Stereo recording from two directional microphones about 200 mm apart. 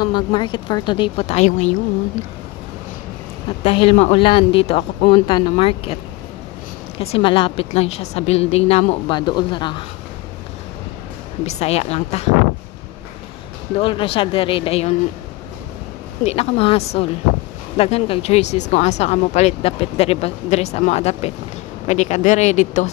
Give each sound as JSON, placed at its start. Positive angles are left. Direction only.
{"t": 0.0, "sound": "a woman's voice", "side_deg": 25}
{"t": 3.4, "sound": "a woman's voice", "side_deg": 25}
{"t": 7.0, "sound": "a woman's voice", "side_deg": 30}
{"t": 11.4, "sound": "speech", "side_deg": 30}
{"t": 13.7, "sound": "a woman's voice", "side_deg": 25}
{"t": 16.3, "sound": "speech", "side_deg": 30}